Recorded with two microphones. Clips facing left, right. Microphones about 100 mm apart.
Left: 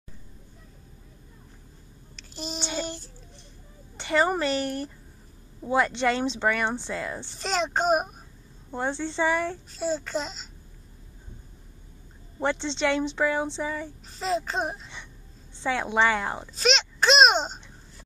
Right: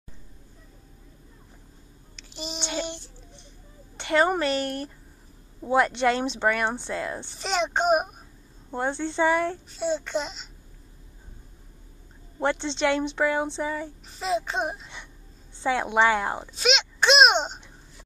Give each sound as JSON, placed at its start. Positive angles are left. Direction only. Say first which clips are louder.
{"t": 2.1, "sound": "child singing", "louder": "left 1 dB", "side_deg": 0}
{"t": 3.9, "sound": "a woman's voice", "louder": "right 2 dB", "side_deg": 0}
{"t": 5.7, "sound": "a child's voice", "louder": "right 2 dB", "side_deg": -15}
{"t": 12.4, "sound": "speech", "louder": "right 1 dB", "side_deg": -10}
{"t": 16.5, "sound": "a sound", "louder": "left 1 dB", "side_deg": 0}